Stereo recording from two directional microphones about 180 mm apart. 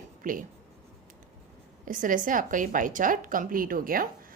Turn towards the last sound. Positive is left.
turn(degrees=-50)  # may be behind; listen again after turning